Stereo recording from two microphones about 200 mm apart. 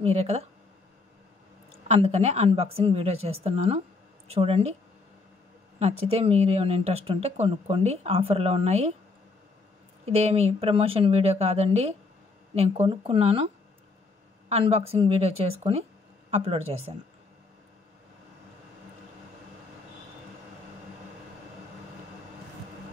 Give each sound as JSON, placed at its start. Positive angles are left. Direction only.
{"t": 0.0, "sound": "speech", "side_deg": -30}
{"t": 1.7, "sound": "speech", "side_deg": -30}
{"t": 5.8, "sound": "speech", "side_deg": -30}
{"t": 10.0, "sound": "a woman's voice", "side_deg": -30}
{"t": 14.5, "sound": "a woman's voice", "side_deg": -30}